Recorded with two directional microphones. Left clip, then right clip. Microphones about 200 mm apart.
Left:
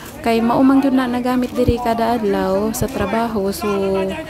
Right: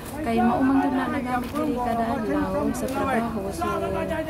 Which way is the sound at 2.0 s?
40° left (ahead or behind).